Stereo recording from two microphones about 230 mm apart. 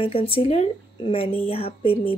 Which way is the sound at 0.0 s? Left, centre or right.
Left.